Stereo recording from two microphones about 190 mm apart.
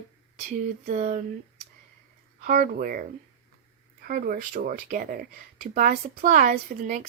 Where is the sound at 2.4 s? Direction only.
45° right (ahead or behind).